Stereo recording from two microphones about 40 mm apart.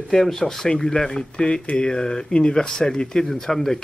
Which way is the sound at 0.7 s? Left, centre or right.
Centre.